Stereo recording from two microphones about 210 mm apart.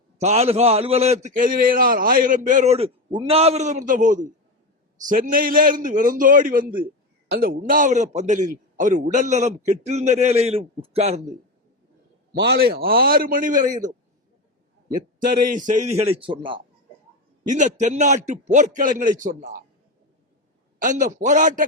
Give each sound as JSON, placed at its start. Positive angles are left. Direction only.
{"t": 0.2, "sound": "a man's voice", "side_deg": -30}
{"t": 12.4, "sound": "a man's voice", "side_deg": -50}
{"t": 14.9, "sound": "a man's voice", "side_deg": -40}
{"t": 17.5, "sound": "a man's voice", "side_deg": -35}
{"t": 20.7, "sound": "a man's voice", "side_deg": -40}